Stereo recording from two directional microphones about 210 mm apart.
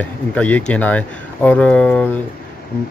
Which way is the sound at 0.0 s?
5° left (ahead or behind).